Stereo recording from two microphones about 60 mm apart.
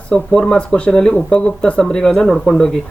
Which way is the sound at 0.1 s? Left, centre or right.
Centre.